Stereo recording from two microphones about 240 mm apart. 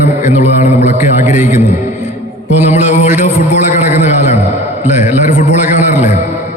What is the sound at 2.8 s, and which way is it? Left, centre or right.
A man's voice, left.